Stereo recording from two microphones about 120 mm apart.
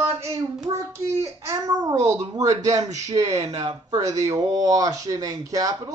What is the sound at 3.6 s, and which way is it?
Speech, 30° right (ahead or behind).